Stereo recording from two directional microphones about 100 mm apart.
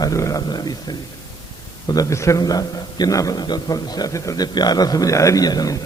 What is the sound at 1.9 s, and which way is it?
Speech, 35° left (ahead or behind).